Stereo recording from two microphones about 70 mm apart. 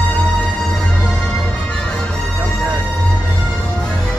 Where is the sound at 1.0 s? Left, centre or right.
Centre.